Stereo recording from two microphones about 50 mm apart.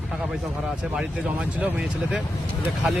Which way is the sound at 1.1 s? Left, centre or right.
Right.